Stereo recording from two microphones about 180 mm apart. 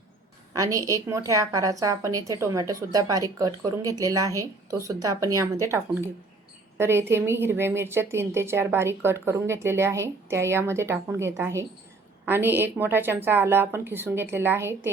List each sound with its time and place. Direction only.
0.5 s a woman's voice: 20° right (ahead or behind)